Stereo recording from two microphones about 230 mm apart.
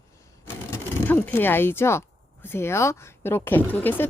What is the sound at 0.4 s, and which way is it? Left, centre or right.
Speech, centre.